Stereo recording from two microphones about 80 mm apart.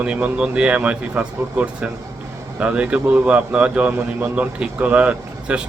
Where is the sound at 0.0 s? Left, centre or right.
Centre.